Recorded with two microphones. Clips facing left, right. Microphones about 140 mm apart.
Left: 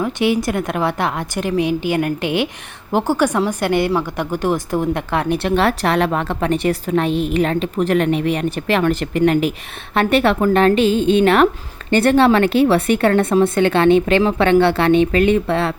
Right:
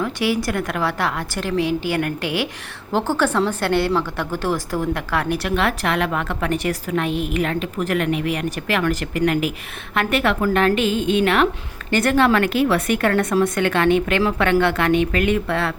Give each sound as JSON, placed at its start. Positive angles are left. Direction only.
{"t": 0.0, "sound": "a woman's voice", "side_deg": 20}